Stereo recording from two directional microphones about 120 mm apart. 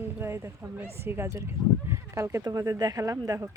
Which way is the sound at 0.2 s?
20° right (ahead or behind).